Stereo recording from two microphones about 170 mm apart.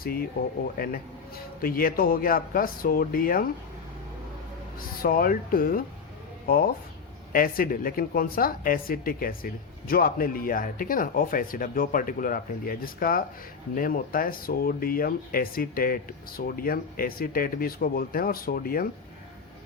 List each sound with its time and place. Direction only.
0.0 s speech: 60° left (ahead or behind)
1.6 s speech: 60° left (ahead or behind)
5.0 s speech: 55° left (ahead or behind)